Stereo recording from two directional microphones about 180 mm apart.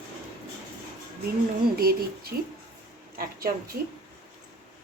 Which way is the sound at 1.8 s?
60° right (ahead or behind).